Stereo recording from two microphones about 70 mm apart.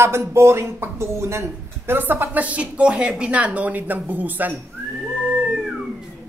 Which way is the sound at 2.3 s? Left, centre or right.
Right.